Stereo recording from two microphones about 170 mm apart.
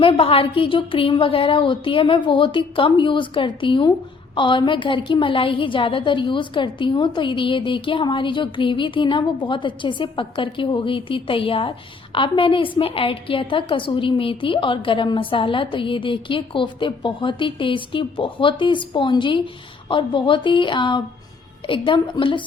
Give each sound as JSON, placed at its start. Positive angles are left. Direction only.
{"t": 0.0, "sound": "a woman's voice", "side_deg": 30}